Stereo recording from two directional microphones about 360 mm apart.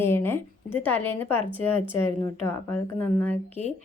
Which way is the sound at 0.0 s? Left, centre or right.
Centre.